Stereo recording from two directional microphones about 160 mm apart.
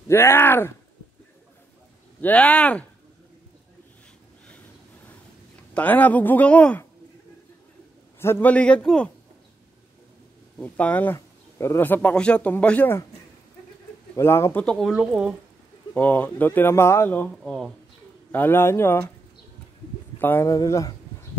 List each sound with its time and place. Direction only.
0.1 s speech: 15° left (ahead or behind)
2.2 s speech: 10° left (ahead or behind)
5.8 s speech: 10° left (ahead or behind)
8.2 s speech: 15° left (ahead or behind)
10.6 s speech: 10° left (ahead or behind)
14.1 s speech: 15° left (ahead or behind)
14.9 s speech: 5° right (ahead or behind)
15.9 s speech: 10° left (ahead or behind)
17.4 s speech: centre (ahead or behind)
18.3 s speech: 15° left (ahead or behind)
20.2 s speech: 15° left (ahead or behind)